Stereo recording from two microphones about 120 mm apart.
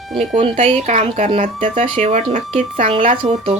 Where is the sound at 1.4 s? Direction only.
75° right (ahead or behind).